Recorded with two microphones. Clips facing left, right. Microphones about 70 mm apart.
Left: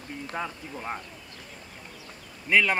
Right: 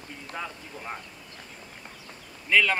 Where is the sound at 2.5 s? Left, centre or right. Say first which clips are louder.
Even; centre.